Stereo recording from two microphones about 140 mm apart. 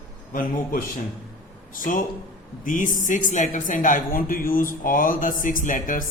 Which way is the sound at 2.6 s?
70° left (ahead or behind).